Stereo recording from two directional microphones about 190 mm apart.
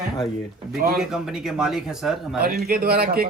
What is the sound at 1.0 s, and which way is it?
Speech, centre (ahead or behind).